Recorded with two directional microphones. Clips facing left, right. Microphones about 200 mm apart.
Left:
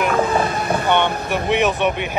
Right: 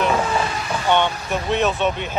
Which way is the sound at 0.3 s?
55° left (ahead or behind).